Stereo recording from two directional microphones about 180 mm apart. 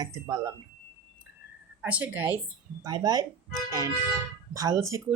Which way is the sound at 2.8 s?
20° right (ahead or behind).